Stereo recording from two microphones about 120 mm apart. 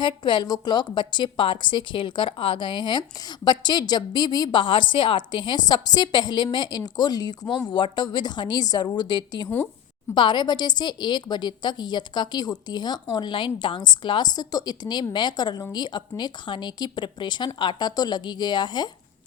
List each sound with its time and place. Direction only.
0.0 s a woman's voice: 40° left (ahead or behind)